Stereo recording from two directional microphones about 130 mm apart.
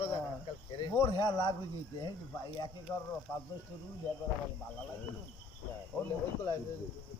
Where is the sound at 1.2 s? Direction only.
35° left (ahead or behind).